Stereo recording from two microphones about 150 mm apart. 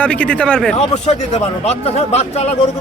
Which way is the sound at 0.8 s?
45° left (ahead or behind).